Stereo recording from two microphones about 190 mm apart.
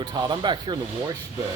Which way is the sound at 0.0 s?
20° right (ahead or behind).